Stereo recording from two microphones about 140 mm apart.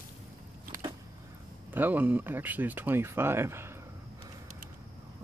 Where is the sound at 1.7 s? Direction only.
10° right (ahead or behind).